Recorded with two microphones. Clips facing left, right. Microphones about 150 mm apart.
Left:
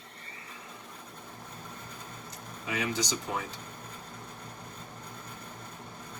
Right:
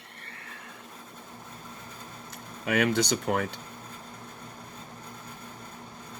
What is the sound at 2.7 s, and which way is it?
Speech, 65° right (ahead or behind).